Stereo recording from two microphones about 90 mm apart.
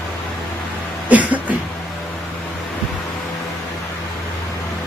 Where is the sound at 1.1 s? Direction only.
15° right (ahead or behind).